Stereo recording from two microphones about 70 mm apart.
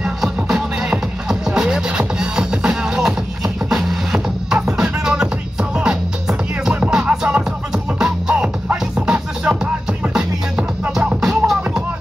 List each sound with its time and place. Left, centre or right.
0.0 s music: centre